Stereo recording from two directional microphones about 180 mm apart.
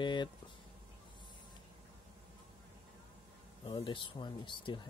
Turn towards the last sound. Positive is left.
turn(degrees=25)  # may be behind; listen again after turning